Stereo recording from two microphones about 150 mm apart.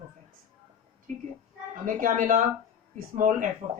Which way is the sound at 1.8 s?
60° right (ahead or behind).